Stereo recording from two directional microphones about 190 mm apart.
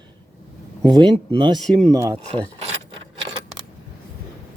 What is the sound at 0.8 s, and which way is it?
Speech, 20° right (ahead or behind).